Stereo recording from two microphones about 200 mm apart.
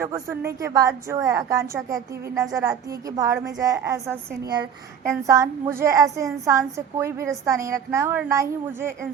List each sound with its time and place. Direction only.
0.0 s a woman's voice: 15° right (ahead or behind)